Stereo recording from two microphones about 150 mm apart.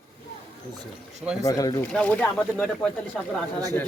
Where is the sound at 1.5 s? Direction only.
25° left (ahead or behind).